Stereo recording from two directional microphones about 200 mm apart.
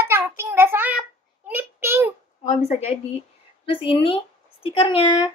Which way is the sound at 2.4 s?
35° left (ahead or behind).